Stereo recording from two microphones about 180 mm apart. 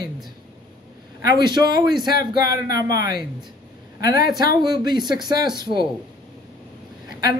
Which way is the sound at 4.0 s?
20° right (ahead or behind).